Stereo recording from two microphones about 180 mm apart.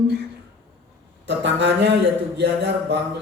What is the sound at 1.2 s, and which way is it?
A man's voice, 75° right (ahead or behind).